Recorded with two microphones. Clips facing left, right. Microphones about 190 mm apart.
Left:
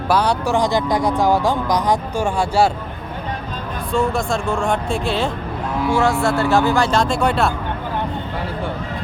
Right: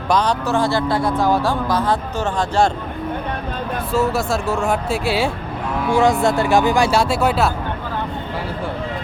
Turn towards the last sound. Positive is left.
turn(degrees=-5)  # may be behind; listen again after turning